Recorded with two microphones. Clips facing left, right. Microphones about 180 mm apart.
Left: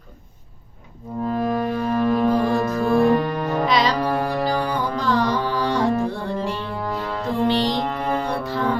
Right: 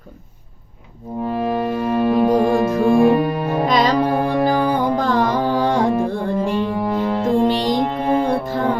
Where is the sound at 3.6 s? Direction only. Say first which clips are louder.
Right 4 dB; 45° right (ahead or behind).